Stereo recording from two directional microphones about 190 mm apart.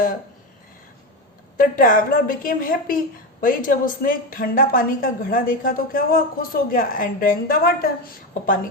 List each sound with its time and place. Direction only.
1.7 s a woman's voice: 45° left (ahead or behind)